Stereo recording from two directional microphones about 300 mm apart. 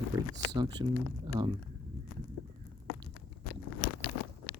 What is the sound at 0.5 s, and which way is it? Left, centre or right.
Speech, centre.